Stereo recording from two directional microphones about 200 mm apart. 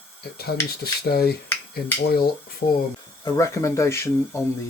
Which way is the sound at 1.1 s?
50° left (ahead or behind).